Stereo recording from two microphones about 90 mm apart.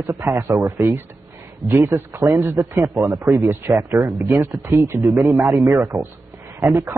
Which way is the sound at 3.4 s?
25° right (ahead or behind).